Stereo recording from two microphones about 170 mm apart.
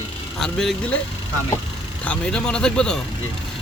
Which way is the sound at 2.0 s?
5° left (ahead or behind).